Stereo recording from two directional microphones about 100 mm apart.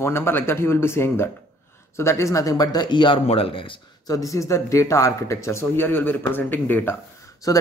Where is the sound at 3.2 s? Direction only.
75° left (ahead or behind).